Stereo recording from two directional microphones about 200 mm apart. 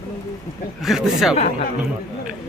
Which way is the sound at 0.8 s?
Centre (ahead or behind).